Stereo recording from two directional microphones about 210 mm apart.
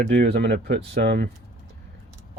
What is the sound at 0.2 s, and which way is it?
Speech, 50° right (ahead or behind).